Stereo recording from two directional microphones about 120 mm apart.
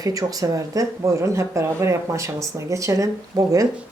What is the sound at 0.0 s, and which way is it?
Speech, 30° right (ahead or behind).